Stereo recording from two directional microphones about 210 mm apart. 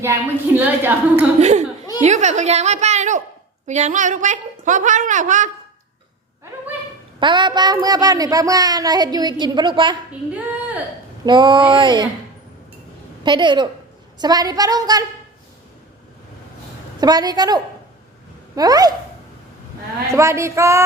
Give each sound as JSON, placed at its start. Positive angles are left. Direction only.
{"t": 0.0, "sound": "a woman's voice", "side_deg": -10}
{"t": 1.4, "sound": "a child's voice", "side_deg": -30}
{"t": 7.2, "sound": "a child's voice", "side_deg": -20}
{"t": 11.3, "sound": "a child's voice", "side_deg": -20}
{"t": 13.2, "sound": "a child's voice", "side_deg": -20}
{"t": 17.0, "sound": "a child's voice", "side_deg": -20}
{"t": 20.1, "sound": "a woman's voice", "side_deg": -15}